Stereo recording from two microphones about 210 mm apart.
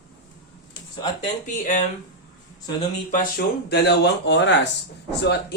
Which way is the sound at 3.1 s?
45° left (ahead or behind).